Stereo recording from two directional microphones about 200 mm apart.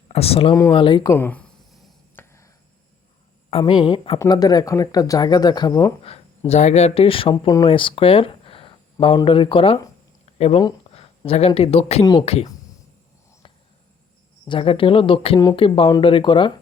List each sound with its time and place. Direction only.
0.1 s speech: 30° left (ahead or behind)
1.1 s writing: 10° left (ahead or behind)
3.6 s speech: 25° left (ahead or behind)
10.2 s a sound: 30° left (ahead or behind)
10.6 s speech: 25° left (ahead or behind)
14.4 s speech: 25° left (ahead or behind)